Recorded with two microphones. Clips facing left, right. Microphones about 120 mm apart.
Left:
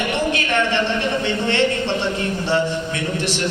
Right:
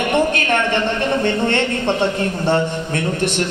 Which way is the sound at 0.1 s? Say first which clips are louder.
Right 4 dB; 50° right (ahead or behind).